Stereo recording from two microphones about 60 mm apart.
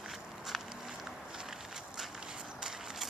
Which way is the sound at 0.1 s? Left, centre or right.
Centre.